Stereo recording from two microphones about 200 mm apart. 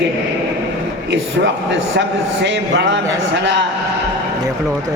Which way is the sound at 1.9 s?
60° right (ahead or behind).